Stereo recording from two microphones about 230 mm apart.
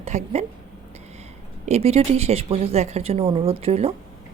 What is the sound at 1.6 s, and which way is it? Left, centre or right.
Speech, right.